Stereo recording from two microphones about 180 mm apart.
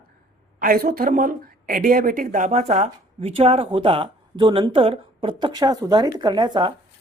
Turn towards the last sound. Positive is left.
turn(degrees=-25)  # may be behind; listen again after turning